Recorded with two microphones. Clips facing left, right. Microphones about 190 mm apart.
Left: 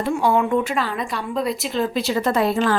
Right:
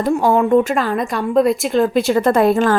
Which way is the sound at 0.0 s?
45° right (ahead or behind).